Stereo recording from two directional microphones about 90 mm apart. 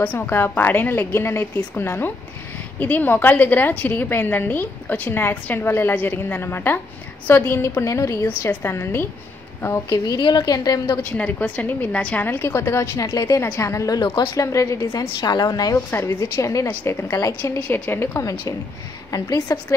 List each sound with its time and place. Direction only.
0.0 s a woman's voice: 20° left (ahead or behind)
9.8 s a woman's voice: 45° left (ahead or behind)
10.9 s a woman's voice: 20° left (ahead or behind)
12.3 s a woman's voice: 25° left (ahead or behind)
14.9 s a woman's voice: 50° left (ahead or behind)
15.9 s a woman's voice: 30° left (ahead or behind)
17.6 s a woman's voice: 20° left (ahead or behind)
19.0 s a woman's voice: 40° left (ahead or behind)